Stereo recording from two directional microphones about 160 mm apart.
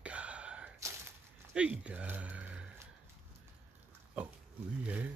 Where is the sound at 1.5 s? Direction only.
5° right (ahead or behind).